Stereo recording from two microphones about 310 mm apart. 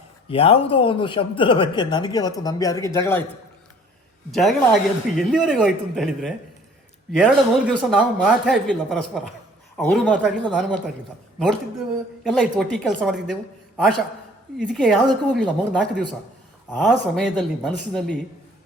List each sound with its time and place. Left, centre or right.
0.3 s speech: centre
4.3 s speech: centre
7.7 s speech: centre
12.2 s a man's voice: centre